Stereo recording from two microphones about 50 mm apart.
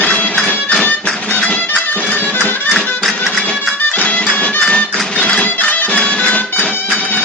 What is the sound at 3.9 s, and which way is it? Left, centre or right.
Music, left.